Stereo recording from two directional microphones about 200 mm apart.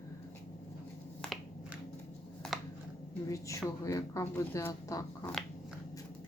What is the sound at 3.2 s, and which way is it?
A woman's voice, 15° left (ahead or behind).